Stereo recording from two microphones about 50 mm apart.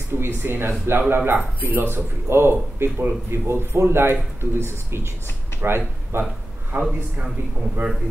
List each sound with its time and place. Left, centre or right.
0.1 s a man's voice: right
5.6 s a man's voice: right
6.7 s a man's voice: right